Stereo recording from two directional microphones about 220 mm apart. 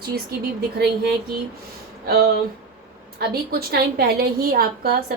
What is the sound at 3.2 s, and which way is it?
A woman's voice, 45° right (ahead or behind).